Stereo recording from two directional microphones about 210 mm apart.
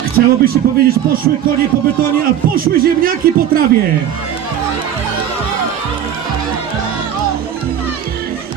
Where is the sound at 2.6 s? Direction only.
45° right (ahead or behind).